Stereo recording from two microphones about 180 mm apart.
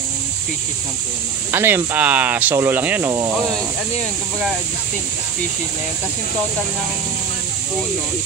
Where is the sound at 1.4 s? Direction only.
10° right (ahead or behind).